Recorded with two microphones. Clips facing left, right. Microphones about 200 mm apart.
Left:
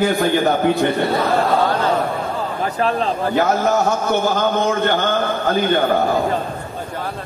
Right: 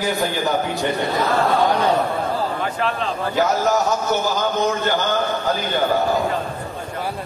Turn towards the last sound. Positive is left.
turn(degrees=55)  # may be behind; listen again after turning